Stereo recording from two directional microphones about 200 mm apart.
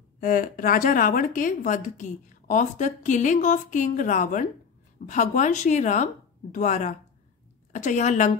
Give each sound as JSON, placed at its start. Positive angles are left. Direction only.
{"t": 0.2, "sound": "speech", "side_deg": 45}